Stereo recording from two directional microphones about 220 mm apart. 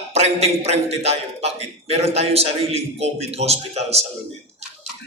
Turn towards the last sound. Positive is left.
turn(degrees=-30)  # may be behind; listen again after turning